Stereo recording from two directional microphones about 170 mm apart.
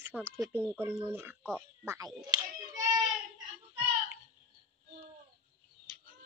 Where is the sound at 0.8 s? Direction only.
15° right (ahead or behind).